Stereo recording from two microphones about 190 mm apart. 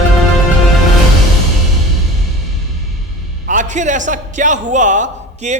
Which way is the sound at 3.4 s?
40° right (ahead or behind).